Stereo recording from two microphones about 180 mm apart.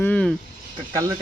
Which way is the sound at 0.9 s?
20° right (ahead or behind).